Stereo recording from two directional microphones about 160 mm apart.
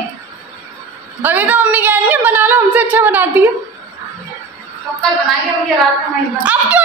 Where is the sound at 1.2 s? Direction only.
10° right (ahead or behind).